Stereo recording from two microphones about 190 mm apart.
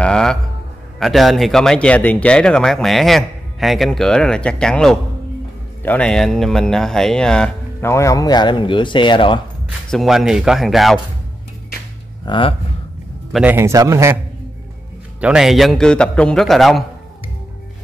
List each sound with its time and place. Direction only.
0.0 s music: 5° left (ahead or behind)
0.9 s speech: centre (ahead or behind); by 9.4 s 25° left (ahead or behind)
9.8 s speech: centre (ahead or behind)
12.3 s speech: 25° left (ahead or behind)
13.3 s a man's voice: 10° right (ahead or behind)